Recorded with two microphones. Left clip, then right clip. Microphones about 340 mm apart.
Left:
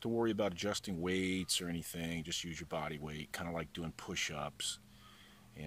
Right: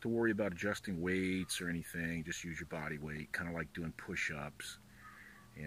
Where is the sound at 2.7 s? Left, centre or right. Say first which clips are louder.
Left 3 dB; centre.